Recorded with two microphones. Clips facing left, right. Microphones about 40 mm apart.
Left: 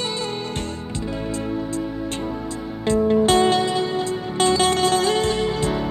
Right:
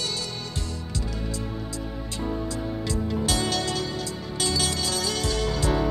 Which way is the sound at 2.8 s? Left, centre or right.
Left.